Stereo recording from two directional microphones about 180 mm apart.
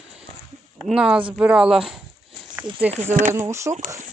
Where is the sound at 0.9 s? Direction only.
5° right (ahead or behind).